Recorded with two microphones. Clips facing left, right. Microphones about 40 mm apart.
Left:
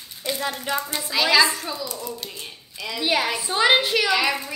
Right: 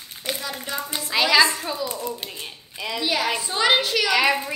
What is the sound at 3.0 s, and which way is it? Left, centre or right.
A woman's voice, centre.